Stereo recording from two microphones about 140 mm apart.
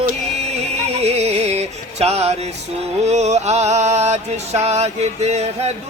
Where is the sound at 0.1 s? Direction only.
50° right (ahead or behind).